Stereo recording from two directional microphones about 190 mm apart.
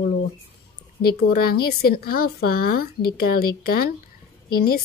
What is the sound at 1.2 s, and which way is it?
Speech, 55° left (ahead or behind).